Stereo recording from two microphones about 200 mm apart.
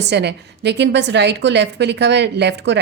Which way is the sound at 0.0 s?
55° right (ahead or behind).